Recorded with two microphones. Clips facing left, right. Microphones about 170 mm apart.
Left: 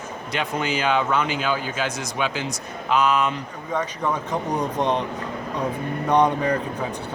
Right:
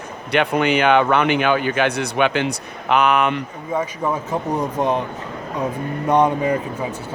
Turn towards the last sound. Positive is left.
turn(degrees=-10)  # may be behind; listen again after turning